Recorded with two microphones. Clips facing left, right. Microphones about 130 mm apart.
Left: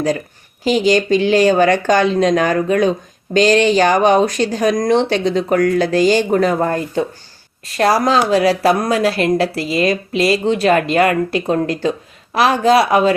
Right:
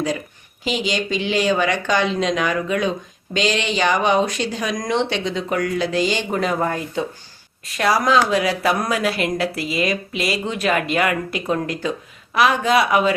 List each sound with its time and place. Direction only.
0.6 s speech: 45° left (ahead or behind)